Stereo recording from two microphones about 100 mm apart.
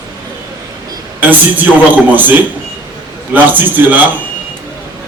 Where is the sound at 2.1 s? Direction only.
20° right (ahead or behind).